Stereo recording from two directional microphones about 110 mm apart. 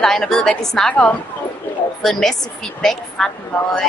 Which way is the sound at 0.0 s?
5° left (ahead or behind).